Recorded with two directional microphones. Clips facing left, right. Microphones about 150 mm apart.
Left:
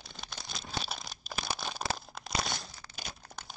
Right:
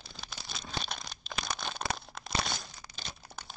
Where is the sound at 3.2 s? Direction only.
5° right (ahead or behind).